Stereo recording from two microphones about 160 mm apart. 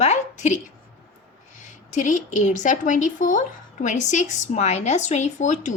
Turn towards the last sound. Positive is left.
turn(degrees=50)  # may be behind; listen again after turning